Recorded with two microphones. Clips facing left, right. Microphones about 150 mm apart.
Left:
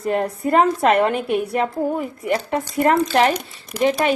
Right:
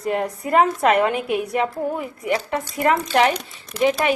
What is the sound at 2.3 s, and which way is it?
A woman's voice, 40° left (ahead or behind).